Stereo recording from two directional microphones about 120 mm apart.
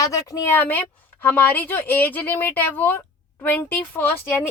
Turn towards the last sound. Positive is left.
turn(degrees=15)  # may be behind; listen again after turning